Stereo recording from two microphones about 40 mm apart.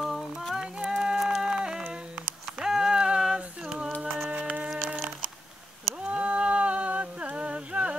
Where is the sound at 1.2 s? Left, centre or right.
Centre.